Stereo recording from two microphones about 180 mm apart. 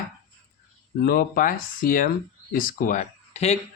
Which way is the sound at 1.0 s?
55° left (ahead or behind).